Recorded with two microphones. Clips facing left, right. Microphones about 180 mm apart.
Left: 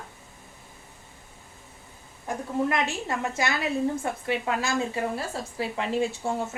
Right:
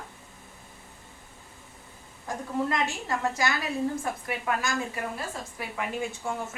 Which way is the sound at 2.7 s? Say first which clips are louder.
Left 1 dB; 25° left (ahead or behind).